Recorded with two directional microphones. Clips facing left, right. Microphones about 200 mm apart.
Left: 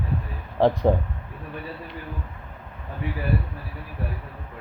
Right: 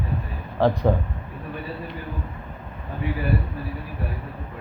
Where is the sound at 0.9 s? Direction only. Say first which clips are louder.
Left 1 dB; 20° left (ahead or behind).